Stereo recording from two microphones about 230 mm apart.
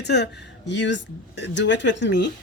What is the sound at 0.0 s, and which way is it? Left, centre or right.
Speech, left.